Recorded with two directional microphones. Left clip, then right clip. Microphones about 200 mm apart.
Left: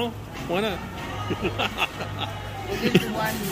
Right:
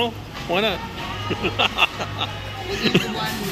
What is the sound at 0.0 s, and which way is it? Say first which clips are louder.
Speech: right 5 dB; 10° left (ahead or behind).